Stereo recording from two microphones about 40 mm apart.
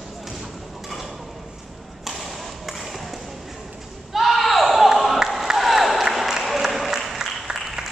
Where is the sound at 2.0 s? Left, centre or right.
Centre.